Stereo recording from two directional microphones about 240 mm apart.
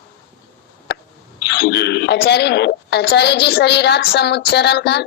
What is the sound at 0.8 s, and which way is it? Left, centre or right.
Speech, left.